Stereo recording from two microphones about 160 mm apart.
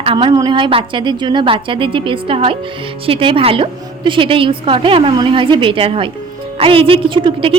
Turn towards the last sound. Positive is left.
turn(degrees=-35)  # may be behind; listen again after turning